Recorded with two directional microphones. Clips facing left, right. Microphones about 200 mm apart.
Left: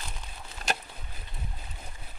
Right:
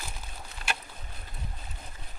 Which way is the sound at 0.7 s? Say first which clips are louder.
Left 4 dB; 40° left (ahead or behind).